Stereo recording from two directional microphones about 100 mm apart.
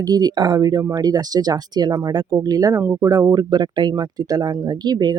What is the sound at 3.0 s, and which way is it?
Speech, 35° right (ahead or behind).